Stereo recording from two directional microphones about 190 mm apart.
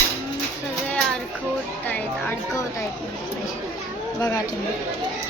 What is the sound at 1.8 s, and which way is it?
Speech, 10° left (ahead or behind).